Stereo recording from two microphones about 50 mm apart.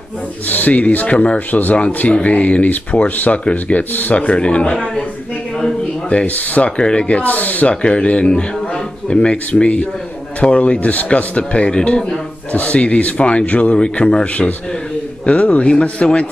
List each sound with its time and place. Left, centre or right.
0.5 s speech: left
6.0 s speech: left
6.8 s speech: centre
7.2 s speech: left
7.7 s a man's voice: left